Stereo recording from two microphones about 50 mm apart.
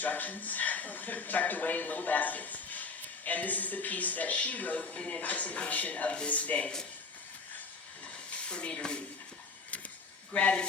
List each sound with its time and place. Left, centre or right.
0.0 s speech: left
8.0 s a sound: left
10.3 s speech: left